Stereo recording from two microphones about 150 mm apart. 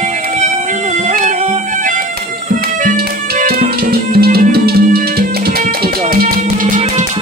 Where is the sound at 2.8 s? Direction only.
75° right (ahead or behind).